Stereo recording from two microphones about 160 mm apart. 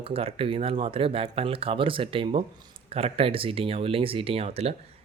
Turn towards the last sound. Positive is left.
turn(degrees=-40)  # may be behind; listen again after turning